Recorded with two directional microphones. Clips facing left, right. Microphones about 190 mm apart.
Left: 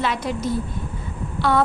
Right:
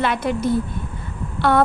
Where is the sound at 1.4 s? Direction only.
55° right (ahead or behind).